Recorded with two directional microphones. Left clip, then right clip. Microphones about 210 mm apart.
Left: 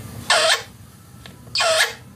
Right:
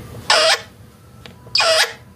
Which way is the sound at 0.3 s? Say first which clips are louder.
Right 3 dB; 25° right (ahead or behind).